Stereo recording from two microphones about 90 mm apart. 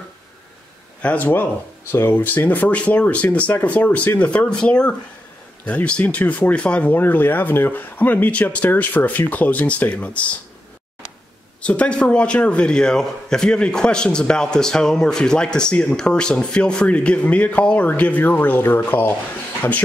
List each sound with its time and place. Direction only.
1.0 s a man's voice: 15° left (ahead or behind)
11.6 s a man's voice: 15° left (ahead or behind)